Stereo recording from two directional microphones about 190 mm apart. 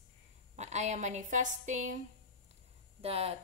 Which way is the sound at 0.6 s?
35° right (ahead or behind).